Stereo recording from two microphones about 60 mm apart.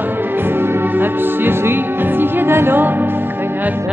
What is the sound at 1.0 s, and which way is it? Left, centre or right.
Music, right.